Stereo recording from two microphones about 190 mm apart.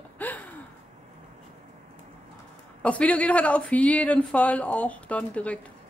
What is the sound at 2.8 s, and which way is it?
Speech, 5° left (ahead or behind).